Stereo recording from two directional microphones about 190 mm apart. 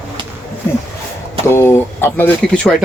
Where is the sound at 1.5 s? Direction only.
10° left (ahead or behind).